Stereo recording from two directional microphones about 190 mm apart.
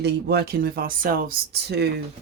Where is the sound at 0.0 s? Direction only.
60° right (ahead or behind).